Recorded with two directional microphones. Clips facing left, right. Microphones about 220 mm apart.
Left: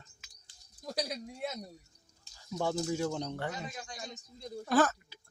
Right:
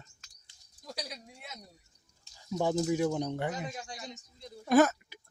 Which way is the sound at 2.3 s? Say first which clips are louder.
Right 4 dB; 15° right (ahead or behind).